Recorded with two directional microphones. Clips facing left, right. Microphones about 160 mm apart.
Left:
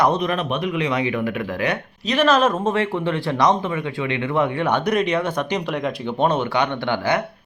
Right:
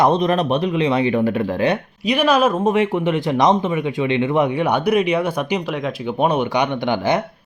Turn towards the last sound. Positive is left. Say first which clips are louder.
# right 3 dB
turn(degrees=-15)  # may be behind; listen again after turning